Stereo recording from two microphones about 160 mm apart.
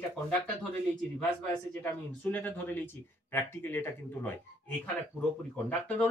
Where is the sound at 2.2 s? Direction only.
10° left (ahead or behind).